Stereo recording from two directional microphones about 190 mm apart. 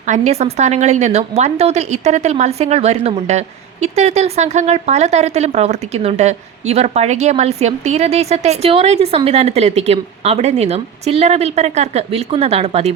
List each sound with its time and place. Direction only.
0.0 s a woman's voice: 35° right (ahead or behind)